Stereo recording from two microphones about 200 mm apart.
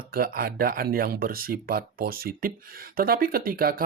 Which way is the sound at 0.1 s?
50° right (ahead or behind).